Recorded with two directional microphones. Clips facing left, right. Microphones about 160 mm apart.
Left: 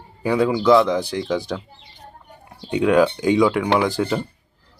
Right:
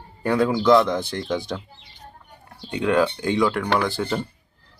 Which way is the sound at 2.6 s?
10° left (ahead or behind).